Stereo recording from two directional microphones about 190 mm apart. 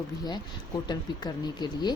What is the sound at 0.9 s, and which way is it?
Speech, 20° left (ahead or behind).